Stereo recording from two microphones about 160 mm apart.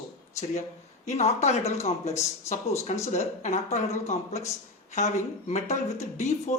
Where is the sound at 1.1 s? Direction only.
45° left (ahead or behind).